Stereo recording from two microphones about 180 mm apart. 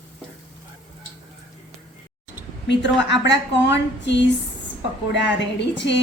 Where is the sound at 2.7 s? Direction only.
80° left.